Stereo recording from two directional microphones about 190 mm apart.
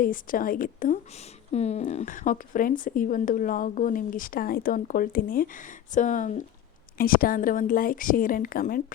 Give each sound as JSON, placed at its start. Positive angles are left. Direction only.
{"t": 0.0, "sound": "speech", "side_deg": 45}
{"t": 1.5, "sound": "speech", "side_deg": 35}